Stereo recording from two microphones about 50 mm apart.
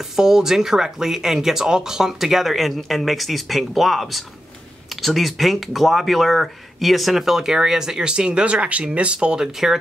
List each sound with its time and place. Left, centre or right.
0.1 s speech: centre